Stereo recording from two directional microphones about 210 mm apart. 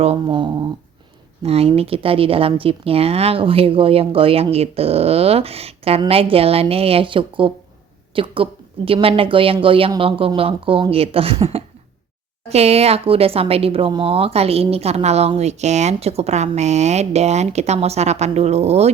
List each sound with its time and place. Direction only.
0.0 s speech: 25° right (ahead or behind)